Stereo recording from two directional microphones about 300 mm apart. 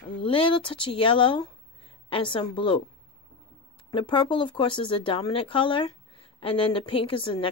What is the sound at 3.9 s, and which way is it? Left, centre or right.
Speech, centre.